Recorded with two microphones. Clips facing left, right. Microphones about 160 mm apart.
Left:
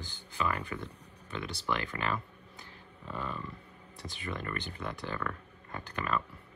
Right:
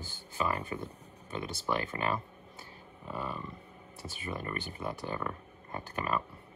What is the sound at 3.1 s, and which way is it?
Speech, 5° right (ahead or behind).